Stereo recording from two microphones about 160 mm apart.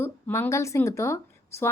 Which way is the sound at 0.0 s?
15° left (ahead or behind).